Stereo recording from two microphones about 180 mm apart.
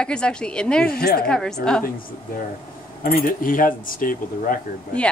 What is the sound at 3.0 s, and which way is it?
Speech, 55° left (ahead or behind).